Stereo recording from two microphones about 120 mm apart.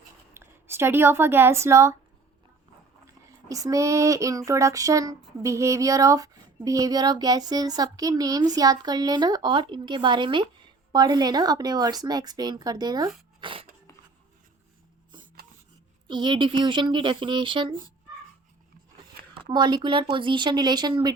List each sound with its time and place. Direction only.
0.3 s speech: 20° right (ahead or behind)
3.5 s child singing: 30° right (ahead or behind)
13.4 s filing: 45° right (ahead or behind)
16.0 s child singing: 40° right (ahead or behind)
19.3 s child singing: 40° right (ahead or behind)